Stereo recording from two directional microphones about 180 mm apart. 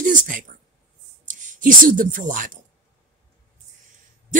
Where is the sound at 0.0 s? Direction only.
45° right (ahead or behind).